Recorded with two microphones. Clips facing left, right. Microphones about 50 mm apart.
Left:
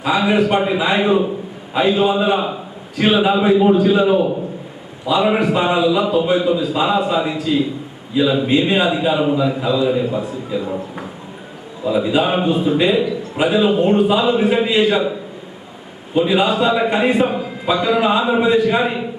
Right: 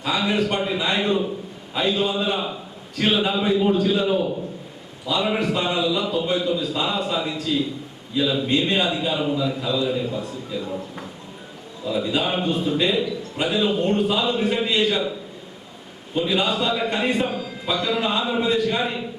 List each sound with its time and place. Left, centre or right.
0.0 s a man's voice: centre
4.1 s a man's voice: left
5.0 s a man's voice: centre
9.3 s a man's voice: left
9.6 s a man's voice: centre
12.0 s a man's voice: centre
13.4 s a man's voice: centre
16.1 s a man's voice: centre
17.2 s a man's voice: left
17.7 s a man's voice: centre